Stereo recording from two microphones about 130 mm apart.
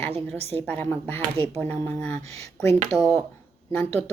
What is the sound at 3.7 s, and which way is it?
Speech, 15° left (ahead or behind).